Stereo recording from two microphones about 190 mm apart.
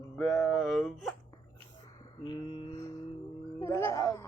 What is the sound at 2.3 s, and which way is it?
Mantra, 25° left (ahead or behind).